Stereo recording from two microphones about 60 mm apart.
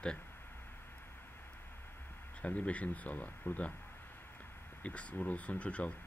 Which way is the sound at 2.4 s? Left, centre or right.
Left.